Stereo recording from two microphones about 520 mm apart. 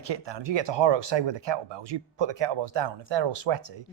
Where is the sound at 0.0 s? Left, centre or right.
Right.